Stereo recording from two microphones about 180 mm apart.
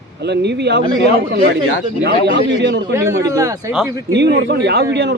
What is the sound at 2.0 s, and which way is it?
Speech, 65° right (ahead or behind).